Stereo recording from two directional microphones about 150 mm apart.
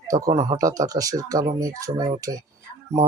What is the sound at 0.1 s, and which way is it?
Speech, 25° right (ahead or behind).